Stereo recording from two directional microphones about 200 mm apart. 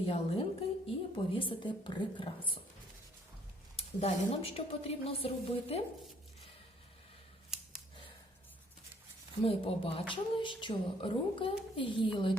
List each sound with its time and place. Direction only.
0.0 s a woman's voice: 30° left (ahead or behind)
3.8 s a woman's voice: 30° left (ahead or behind)
9.4 s a woman's voice: 30° left (ahead or behind)